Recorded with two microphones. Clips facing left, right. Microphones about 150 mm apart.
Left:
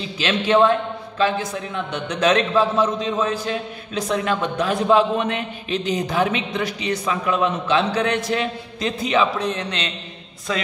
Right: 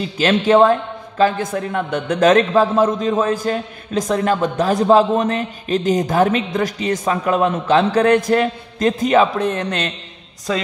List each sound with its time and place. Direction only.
0.0 s a man's voice: 45° right (ahead or behind)
10.5 s a woman's voice: 35° right (ahead or behind)